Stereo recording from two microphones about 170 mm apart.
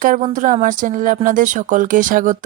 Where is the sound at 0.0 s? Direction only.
55° right (ahead or behind).